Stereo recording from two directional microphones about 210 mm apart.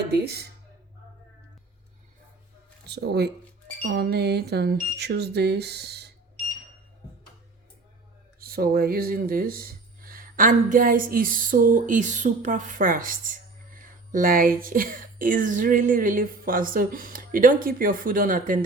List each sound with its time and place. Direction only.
0.1 s speech: 50° right (ahead or behind)
2.8 s speech: 50° right (ahead or behind)
8.4 s speech: 45° right (ahead or behind)